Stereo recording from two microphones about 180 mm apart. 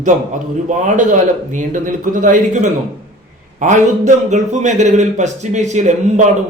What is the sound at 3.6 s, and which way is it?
Speech, 45° right (ahead or behind).